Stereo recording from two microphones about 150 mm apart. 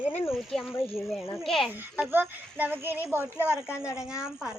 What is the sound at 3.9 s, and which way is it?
Speech, 20° left (ahead or behind).